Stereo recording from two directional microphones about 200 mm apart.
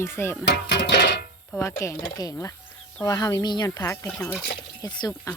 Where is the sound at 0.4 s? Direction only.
60° left (ahead or behind).